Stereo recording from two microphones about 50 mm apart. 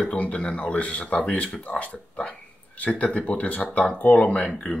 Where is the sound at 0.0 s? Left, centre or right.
Left.